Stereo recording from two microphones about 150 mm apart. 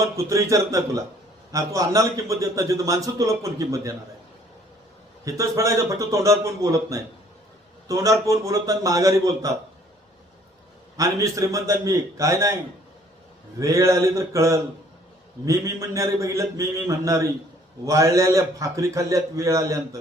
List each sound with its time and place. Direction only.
0.0 s a man's voice: 20° right (ahead or behind)
5.2 s a man's voice: 20° right (ahead or behind)
10.9 s a man's voice: 20° right (ahead or behind)
13.6 s a man's voice: 20° right (ahead or behind)